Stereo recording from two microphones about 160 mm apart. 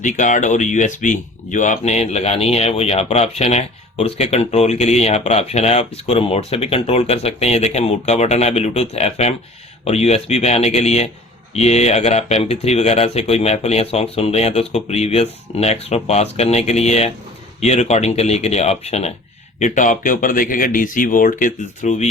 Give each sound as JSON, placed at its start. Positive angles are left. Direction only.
{"t": 0.0, "sound": "speech", "side_deg": 50}
{"t": 19.5, "sound": "speech", "side_deg": 50}